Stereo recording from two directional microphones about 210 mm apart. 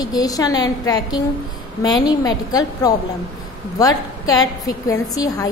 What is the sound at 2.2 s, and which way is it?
A woman's voice, 15° left (ahead or behind).